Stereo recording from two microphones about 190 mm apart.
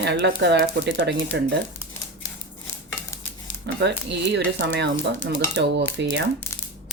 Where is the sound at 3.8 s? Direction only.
65° right (ahead or behind).